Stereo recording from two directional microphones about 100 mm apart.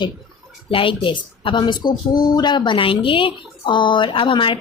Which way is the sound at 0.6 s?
60° left (ahead or behind).